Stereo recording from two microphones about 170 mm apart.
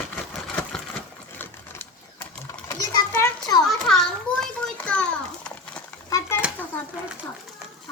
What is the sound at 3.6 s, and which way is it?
Children playing, centre (ahead or behind).